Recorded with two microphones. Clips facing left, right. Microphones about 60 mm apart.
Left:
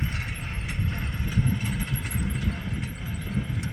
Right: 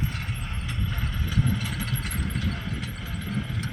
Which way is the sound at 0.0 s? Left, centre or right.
Left.